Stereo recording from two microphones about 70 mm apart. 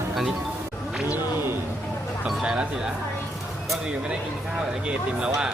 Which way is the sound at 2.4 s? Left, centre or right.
Centre.